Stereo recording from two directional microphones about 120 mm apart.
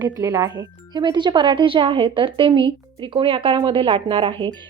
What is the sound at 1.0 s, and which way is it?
A woman's voice, 40° right (ahead or behind).